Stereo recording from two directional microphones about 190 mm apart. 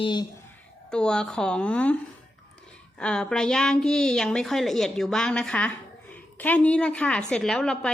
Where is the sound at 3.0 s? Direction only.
5° left (ahead or behind).